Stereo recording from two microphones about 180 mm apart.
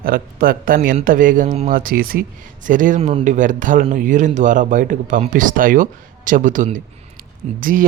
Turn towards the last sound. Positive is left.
turn(degrees=-50)  # may be behind; listen again after turning